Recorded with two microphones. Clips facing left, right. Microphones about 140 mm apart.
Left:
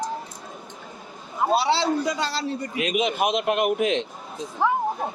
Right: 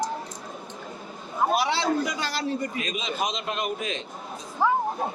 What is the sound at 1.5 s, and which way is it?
Speech, 30° left (ahead or behind).